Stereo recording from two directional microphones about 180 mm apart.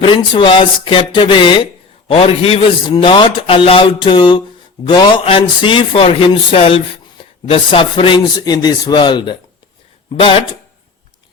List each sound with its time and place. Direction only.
0.0 s speech: 30° left (ahead or behind)